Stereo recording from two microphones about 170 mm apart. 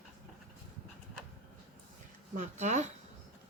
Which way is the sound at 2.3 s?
45° right (ahead or behind).